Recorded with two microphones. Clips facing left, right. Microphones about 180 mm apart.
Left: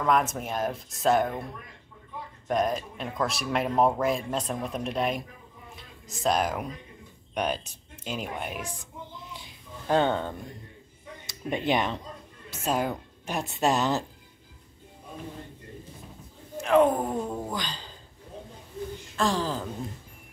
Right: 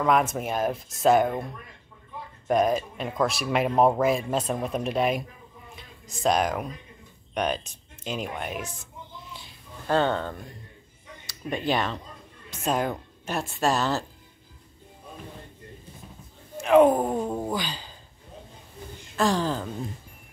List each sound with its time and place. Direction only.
0.0 s speech: centre (ahead or behind)
2.4 s speech: 5° right (ahead or behind)
9.8 s speech: 15° left (ahead or behind)
12.4 s a woman's voice: 5° left (ahead or behind)
16.6 s speech: 10° right (ahead or behind)
16.9 s speech: 20° right (ahead or behind)
17.5 s speech: 5° right (ahead or behind)
19.1 s speech: centre (ahead or behind)